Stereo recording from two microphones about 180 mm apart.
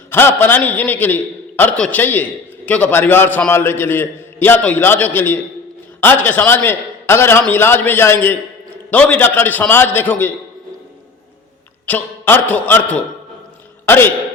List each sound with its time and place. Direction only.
0.1 s a man's voice: 10° left (ahead or behind)
11.9 s a man's voice: 10° left (ahead or behind)